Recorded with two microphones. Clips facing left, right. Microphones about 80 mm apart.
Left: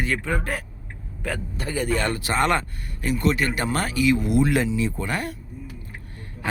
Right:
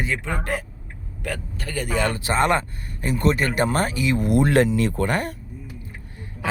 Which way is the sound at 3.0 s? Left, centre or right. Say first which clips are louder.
Right 1 dB; right.